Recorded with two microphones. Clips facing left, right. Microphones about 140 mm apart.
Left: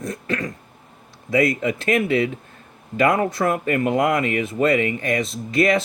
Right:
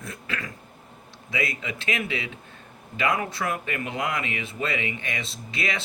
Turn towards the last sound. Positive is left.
turn(degrees=45)  # may be behind; listen again after turning